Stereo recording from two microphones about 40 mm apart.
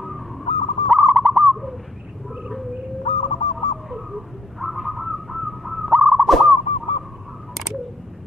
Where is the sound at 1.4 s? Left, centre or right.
Centre.